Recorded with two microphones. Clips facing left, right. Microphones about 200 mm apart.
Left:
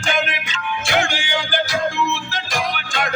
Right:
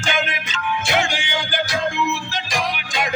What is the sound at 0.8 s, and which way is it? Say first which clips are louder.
Music: left 3 dB; 20° right (ahead or behind).